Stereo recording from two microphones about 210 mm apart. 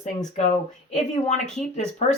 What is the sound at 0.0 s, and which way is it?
Speech, 35° left (ahead or behind).